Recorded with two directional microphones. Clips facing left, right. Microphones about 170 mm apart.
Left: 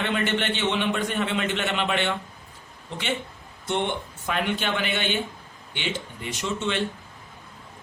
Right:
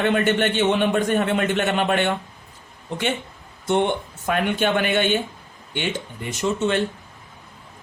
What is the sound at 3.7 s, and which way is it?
A man's voice, 50° right (ahead or behind).